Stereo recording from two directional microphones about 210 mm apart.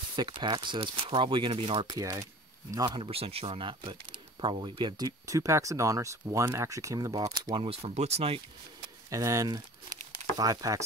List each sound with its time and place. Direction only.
0.1 s speech: 20° right (ahead or behind)
9.1 s speech: 15° right (ahead or behind)